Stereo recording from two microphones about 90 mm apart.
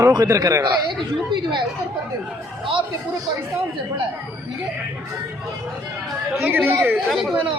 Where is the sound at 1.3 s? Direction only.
60° right (ahead or behind).